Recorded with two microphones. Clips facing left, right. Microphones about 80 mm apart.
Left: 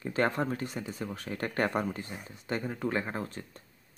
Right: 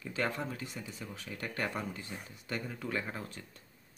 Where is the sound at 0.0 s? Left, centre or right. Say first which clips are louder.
Left 6 dB; left.